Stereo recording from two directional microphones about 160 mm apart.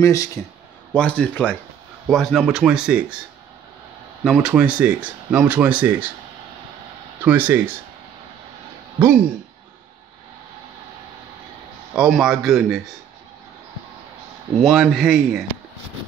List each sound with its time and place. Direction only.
0.0 s speech: 20° left (ahead or behind)
0.9 s speech: 5° left (ahead or behind)
4.2 s speech: 5° right (ahead or behind)
7.2 s speech: 10° right (ahead or behind)
11.9 s speech: 5° right (ahead or behind)
14.5 s speech: centre (ahead or behind)